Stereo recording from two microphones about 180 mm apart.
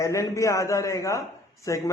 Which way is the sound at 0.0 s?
15° left (ahead or behind).